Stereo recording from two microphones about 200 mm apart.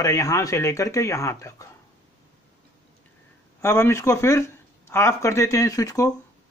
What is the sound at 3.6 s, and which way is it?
Speech, 10° left (ahead or behind).